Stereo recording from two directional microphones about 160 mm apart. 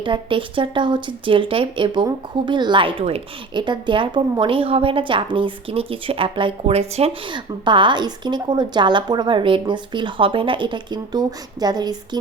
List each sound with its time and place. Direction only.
0.0 s speech: 30° right (ahead or behind)